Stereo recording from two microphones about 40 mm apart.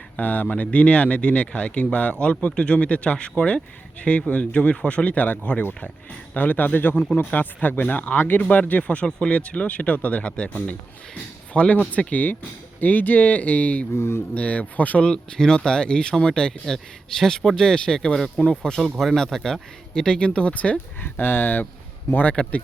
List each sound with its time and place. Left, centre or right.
0.2 s speech: left
9.0 s speech: centre
9.3 s speech: left
10.2 s speech: left
11.9 s speech: left
13.9 s speech: left
14.3 s speech: left
15.0 s speech: centre
18.9 s speech: centre; by 20.5 s left
20.5 s speech: left
21.0 s speech: left
22.1 s speech: left